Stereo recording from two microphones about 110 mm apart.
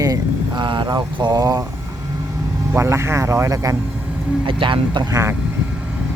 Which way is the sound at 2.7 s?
25° right (ahead or behind).